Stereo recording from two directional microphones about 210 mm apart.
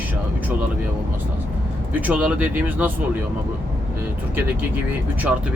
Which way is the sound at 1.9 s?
10° right (ahead or behind).